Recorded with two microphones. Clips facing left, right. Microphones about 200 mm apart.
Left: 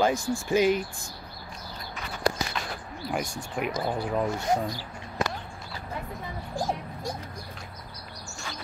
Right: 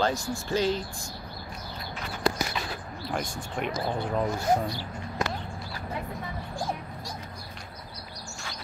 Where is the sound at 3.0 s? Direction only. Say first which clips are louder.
Left 1 dB; 5° left (ahead or behind).